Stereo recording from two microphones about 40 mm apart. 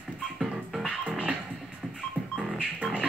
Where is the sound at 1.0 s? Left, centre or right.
Right.